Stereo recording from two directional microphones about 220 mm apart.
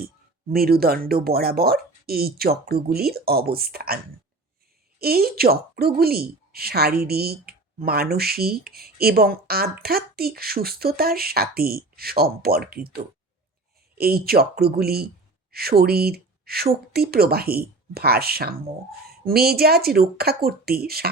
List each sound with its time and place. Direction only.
0.0 s a woman's voice: 45° right (ahead or behind)
14.0 s a woman's voice: 45° right (ahead or behind)